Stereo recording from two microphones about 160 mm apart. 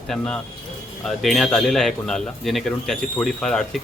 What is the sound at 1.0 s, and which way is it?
A man's voice, centre (ahead or behind).